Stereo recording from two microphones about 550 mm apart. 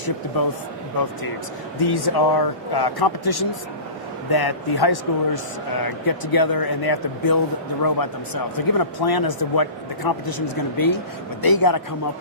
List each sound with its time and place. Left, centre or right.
1.9 s a man's voice: left